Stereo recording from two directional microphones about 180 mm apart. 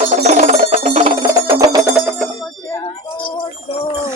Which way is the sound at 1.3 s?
20° right (ahead or behind).